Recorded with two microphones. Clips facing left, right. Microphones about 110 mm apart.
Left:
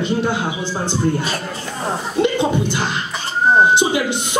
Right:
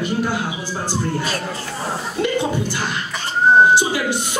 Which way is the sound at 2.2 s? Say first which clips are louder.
Left 3 dB; 20° left (ahead or behind).